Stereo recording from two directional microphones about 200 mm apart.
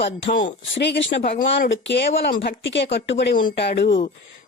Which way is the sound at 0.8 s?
60° left (ahead or behind).